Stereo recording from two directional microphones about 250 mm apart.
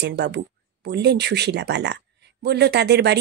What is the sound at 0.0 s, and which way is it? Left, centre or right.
Speech, right.